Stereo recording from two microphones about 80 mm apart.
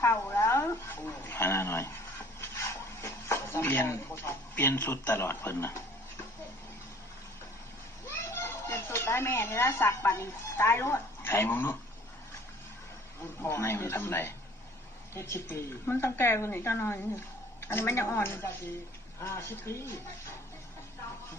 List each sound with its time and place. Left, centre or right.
0.0 s speech: left
2.4 s a sound: left
8.0 s a child's voice: left
13.4 s a woman's voice: left